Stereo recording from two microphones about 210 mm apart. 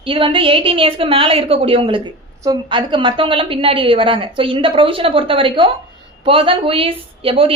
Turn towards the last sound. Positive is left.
turn(degrees=-25)  # may be behind; listen again after turning